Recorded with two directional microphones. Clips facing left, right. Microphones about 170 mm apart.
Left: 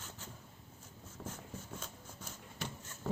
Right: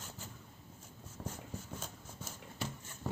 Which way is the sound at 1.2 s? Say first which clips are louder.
Right 1 dB; 15° right (ahead or behind).